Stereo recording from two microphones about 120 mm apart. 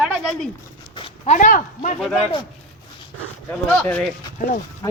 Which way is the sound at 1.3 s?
90° left.